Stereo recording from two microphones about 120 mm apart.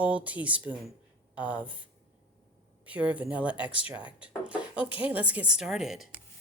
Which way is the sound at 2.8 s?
10° right (ahead or behind).